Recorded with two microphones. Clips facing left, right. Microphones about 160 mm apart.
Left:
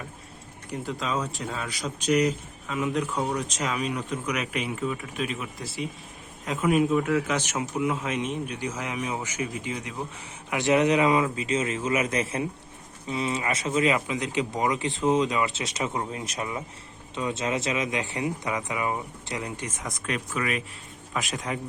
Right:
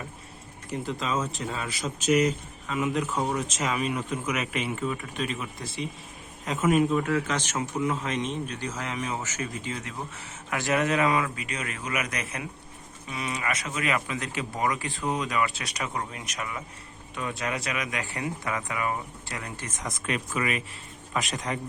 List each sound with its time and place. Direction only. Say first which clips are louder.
0.7 s speech: even; centre (ahead or behind)